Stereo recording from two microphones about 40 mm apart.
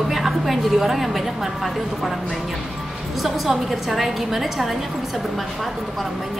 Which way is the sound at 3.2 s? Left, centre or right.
Centre.